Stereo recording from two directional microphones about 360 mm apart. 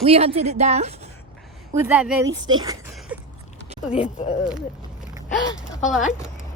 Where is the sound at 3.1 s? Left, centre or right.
Centre.